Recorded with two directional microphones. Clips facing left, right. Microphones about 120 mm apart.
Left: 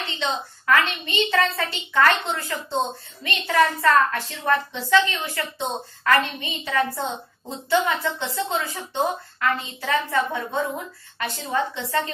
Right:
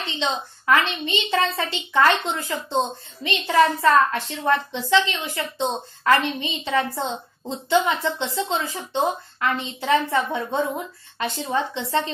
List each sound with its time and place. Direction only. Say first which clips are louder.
0.0 s a woman's voice: right 1 dB; 20° right (ahead or behind)